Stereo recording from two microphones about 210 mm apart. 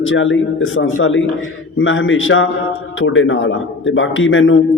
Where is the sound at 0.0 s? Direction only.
65° left (ahead or behind).